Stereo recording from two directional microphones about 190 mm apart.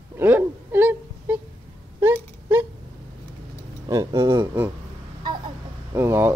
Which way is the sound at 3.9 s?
15° right (ahead or behind).